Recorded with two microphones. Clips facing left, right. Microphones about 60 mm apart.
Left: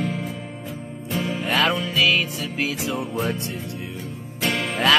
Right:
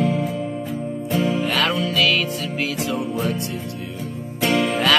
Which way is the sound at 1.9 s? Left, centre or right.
Centre.